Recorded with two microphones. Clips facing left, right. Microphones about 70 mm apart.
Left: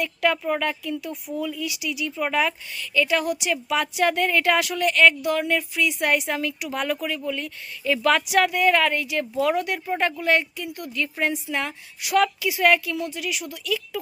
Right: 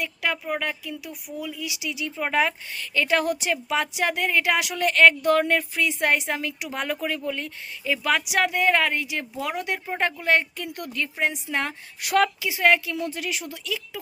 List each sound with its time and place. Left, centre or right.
0.0 s a woman's voice: centre
4.8 s a woman's voice: right
7.9 s speech: centre
8.4 s a woman's voice: right
12.4 s a woman's voice: right